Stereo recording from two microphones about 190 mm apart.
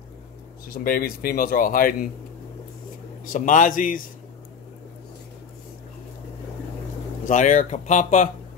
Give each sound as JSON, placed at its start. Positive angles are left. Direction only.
{"t": 0.7, "sound": "speech", "side_deg": 50}
{"t": 3.3, "sound": "speech", "side_deg": 45}
{"t": 7.2, "sound": "speech", "side_deg": 40}